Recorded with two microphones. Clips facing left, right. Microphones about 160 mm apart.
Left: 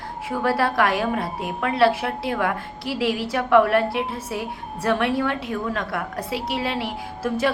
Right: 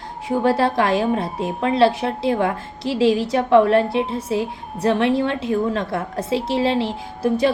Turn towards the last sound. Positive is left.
turn(degrees=-20)  # may be behind; listen again after turning